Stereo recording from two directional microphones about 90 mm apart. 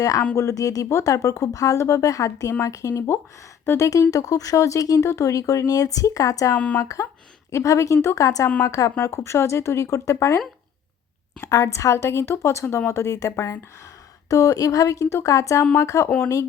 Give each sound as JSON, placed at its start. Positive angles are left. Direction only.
{"t": 0.3, "sound": "speech", "side_deg": 35}
{"t": 6.6, "sound": "speech", "side_deg": 15}
{"t": 6.8, "sound": "speech", "side_deg": 35}
{"t": 11.4, "sound": "speech", "side_deg": 35}